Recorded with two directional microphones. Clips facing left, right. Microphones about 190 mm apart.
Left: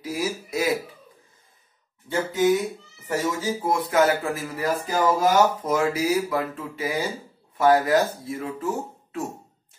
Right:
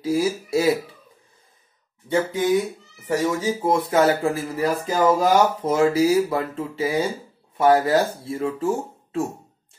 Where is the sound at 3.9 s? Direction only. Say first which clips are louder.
Right 1 dB; 25° right (ahead or behind).